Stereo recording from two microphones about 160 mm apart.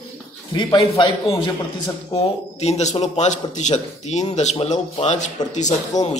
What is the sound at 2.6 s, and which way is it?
A man's voice, 45° left (ahead or behind).